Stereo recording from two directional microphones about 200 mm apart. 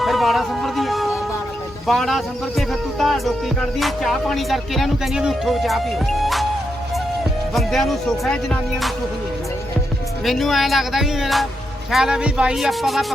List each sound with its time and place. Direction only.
0.0 s music: centre (ahead or behind)
7.5 s music: centre (ahead or behind)
10.2 s music: centre (ahead or behind)